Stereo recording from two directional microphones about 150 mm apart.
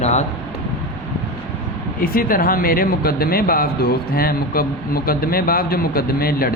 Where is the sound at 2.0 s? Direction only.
75° left (ahead or behind).